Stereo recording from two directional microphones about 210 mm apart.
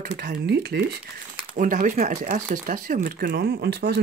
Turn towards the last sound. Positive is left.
turn(degrees=-50)  # may be behind; listen again after turning